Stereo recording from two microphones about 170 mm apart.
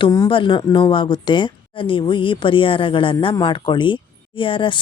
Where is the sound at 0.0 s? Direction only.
20° left (ahead or behind).